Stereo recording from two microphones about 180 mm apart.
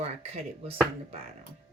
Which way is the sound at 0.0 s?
35° right (ahead or behind).